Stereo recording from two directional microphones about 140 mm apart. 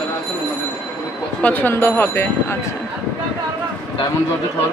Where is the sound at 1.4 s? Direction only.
15° left (ahead or behind).